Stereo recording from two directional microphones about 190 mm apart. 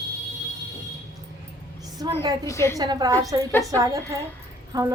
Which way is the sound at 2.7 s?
20° right (ahead or behind).